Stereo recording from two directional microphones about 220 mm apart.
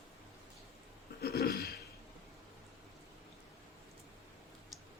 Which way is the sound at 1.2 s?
45° left (ahead or behind).